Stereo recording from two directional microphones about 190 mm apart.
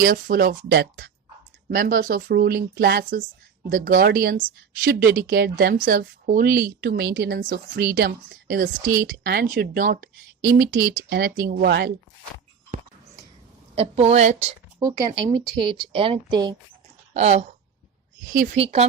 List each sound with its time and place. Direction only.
0.0 s speech: 50° right (ahead or behind)
1.7 s speech: 45° right (ahead or behind)
13.7 s a woman's voice: 35° right (ahead or behind)
14.8 s speech: 20° right (ahead or behind)
17.2 s a woman's voice: 35° right (ahead or behind)
18.6 s a woman's voice: 30° right (ahead or behind)